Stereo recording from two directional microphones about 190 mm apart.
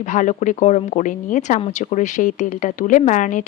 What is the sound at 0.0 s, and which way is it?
Speech, 40° left (ahead or behind).